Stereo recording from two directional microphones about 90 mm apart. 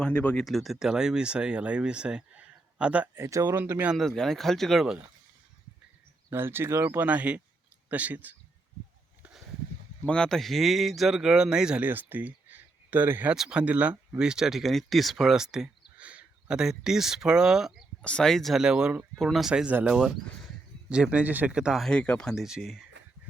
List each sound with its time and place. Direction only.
0.0 s speech: 15° left (ahead or behind)
0.4 s speech: centre (ahead or behind)
3.2 s speech: 35° right (ahead or behind)
3.9 s speech: 5° left (ahead or behind)
6.3 s speech: 25° right (ahead or behind)
10.1 s speech: 5° left (ahead or behind); by 11.9 s 10° right (ahead or behind)
11.9 s speech: 20° right (ahead or behind)
13.3 s speech: 10° right (ahead or behind)
18.0 s speech: 10° left (ahead or behind); by 21.8 s 10° right (ahead or behind)
21.8 s speech: 10° left (ahead or behind)
22.4 s speech: 5° right (ahead or behind)